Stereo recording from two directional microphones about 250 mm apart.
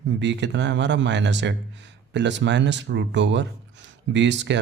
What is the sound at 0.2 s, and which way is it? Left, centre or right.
Speech, right.